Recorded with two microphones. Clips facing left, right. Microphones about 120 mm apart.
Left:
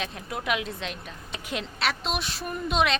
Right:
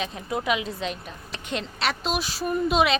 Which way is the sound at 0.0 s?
Centre (ahead or behind).